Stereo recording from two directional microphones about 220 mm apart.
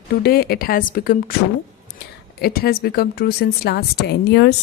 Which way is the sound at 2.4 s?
45° left (ahead or behind).